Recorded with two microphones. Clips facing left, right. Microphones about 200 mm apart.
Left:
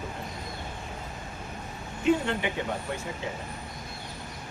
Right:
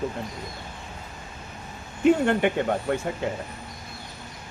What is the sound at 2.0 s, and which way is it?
Speech, 55° right (ahead or behind).